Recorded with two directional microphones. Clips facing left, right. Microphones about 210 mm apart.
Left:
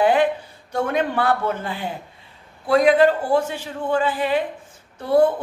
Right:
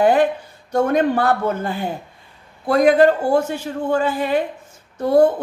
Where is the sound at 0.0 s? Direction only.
45° right (ahead or behind).